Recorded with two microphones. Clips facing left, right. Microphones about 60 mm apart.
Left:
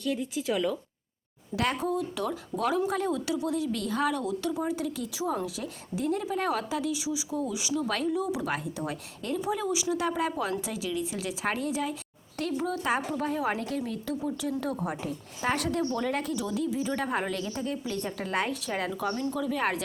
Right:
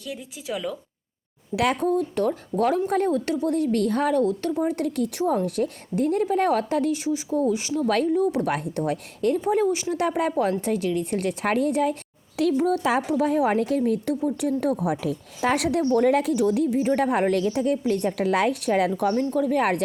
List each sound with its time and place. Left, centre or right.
0.0 s speech: centre
1.5 s a woman's voice: right
1.9 s a woman's voice: right
3.1 s speech: right
3.5 s a woman's voice: right
8.1 s a woman's voice: right
15.8 s a woman's voice: right
16.0 s speech: right
16.4 s a woman's voice: right
18.9 s a woman's voice: right
19.5 s a woman's voice: right